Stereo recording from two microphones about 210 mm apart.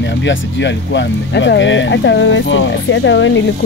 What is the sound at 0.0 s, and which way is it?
Speech, 60° left (ahead or behind).